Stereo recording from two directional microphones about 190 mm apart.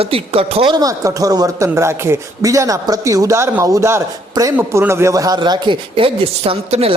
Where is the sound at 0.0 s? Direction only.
30° right (ahead or behind).